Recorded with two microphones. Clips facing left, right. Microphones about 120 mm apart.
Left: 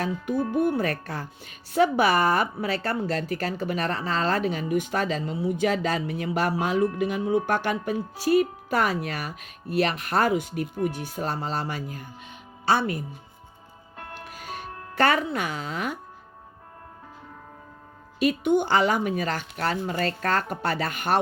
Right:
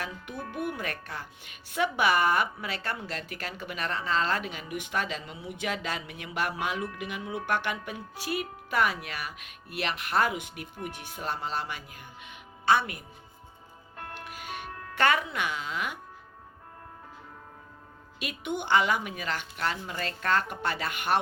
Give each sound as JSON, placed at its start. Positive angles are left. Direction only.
{"t": 0.0, "sound": "speech", "side_deg": 35}
{"t": 14.1, "sound": "music", "side_deg": 40}
{"t": 18.2, "sound": "speech", "side_deg": 40}